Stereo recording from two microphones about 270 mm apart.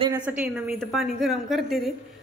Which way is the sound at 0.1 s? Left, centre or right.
Centre.